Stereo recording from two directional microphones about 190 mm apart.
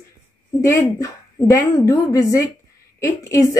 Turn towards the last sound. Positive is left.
turn(degrees=15)  # may be behind; listen again after turning